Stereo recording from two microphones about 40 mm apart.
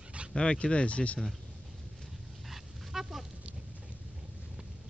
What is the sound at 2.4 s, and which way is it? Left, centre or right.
Dog, centre.